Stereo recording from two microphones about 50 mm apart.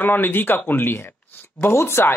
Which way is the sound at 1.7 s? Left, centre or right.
Left.